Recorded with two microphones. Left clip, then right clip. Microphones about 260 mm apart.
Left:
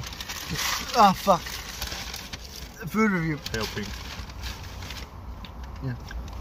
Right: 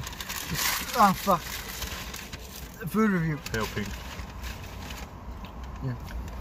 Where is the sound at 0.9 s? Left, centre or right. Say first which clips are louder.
Left 4 dB; left.